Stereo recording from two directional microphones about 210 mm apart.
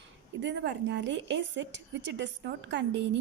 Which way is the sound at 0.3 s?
55° right (ahead or behind).